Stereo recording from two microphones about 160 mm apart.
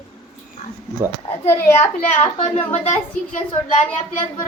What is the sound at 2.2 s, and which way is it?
Speech, 40° left (ahead or behind).